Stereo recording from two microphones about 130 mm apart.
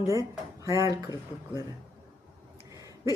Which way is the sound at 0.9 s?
30° left (ahead or behind).